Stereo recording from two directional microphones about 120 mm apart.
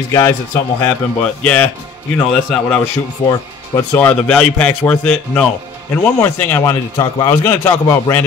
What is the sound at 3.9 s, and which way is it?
A man's voice, 10° left (ahead or behind).